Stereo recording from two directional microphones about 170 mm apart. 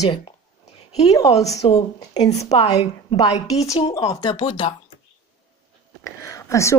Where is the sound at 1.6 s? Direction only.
40° left (ahead or behind).